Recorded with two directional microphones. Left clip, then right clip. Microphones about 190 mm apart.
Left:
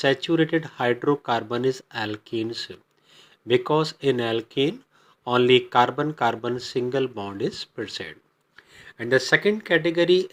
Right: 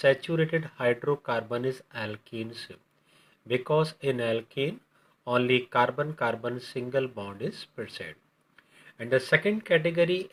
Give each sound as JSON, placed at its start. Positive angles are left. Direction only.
{"t": 0.0, "sound": "speech", "side_deg": 35}